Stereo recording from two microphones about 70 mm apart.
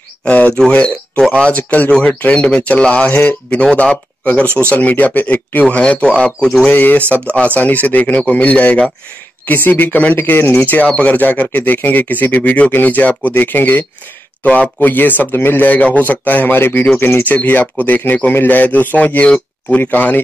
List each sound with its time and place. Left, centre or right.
0.2 s a man's voice: centre
6.7 s a man's voice: left
9.5 s a man's voice: left